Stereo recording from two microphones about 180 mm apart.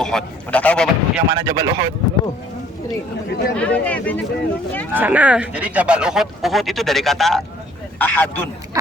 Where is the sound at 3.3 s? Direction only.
65° left (ahead or behind).